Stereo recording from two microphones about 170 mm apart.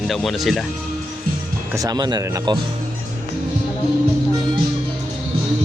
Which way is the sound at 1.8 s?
25° right (ahead or behind).